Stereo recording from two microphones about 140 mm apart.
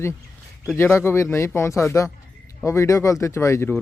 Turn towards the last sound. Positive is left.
turn(degrees=20)  # may be behind; listen again after turning